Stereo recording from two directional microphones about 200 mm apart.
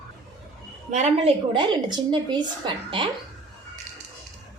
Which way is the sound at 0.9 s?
35° right (ahead or behind).